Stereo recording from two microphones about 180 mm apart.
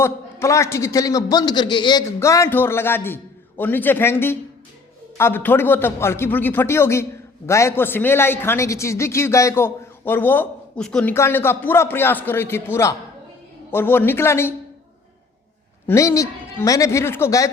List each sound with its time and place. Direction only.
0.0 s a man's voice: 15° left (ahead or behind)
15.9 s a man's voice: 15° left (ahead or behind)